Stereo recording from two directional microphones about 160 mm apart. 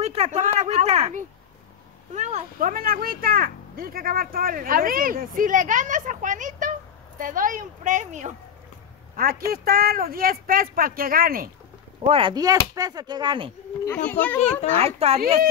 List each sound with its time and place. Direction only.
0.0 s speech: 40° right (ahead or behind)
9.1 s speech: 65° right (ahead or behind)
12.1 s speech: 30° right (ahead or behind)
13.9 s a child's voice: 10° left (ahead or behind)
14.8 s speech: 40° right (ahead or behind)